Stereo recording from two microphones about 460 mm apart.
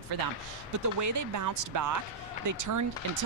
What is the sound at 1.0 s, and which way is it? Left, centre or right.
Speech, right.